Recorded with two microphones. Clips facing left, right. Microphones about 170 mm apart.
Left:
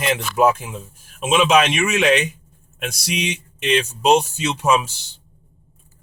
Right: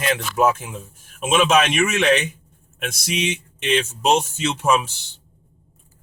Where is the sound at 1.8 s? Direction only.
5° left (ahead or behind).